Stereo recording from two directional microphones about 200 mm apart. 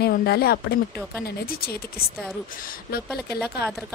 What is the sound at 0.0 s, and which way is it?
Speech, 50° left (ahead or behind).